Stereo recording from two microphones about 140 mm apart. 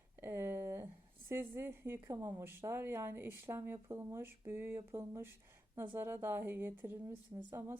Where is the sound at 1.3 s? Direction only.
15° right (ahead or behind).